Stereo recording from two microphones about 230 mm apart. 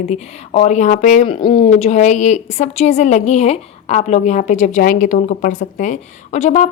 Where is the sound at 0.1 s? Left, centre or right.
Left.